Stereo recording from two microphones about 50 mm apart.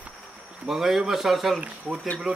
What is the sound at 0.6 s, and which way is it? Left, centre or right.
Speech, centre.